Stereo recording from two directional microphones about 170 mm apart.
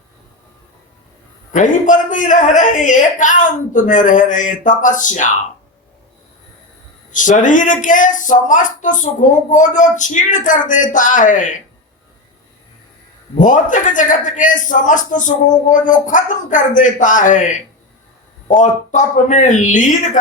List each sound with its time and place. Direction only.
1.5 s speech: 50° left (ahead or behind)
7.1 s speech: 50° left (ahead or behind)
13.3 s speech: 50° left (ahead or behind)